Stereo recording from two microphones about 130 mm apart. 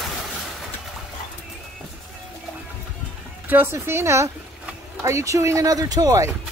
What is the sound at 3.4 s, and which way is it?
Speech, 15° right (ahead or behind).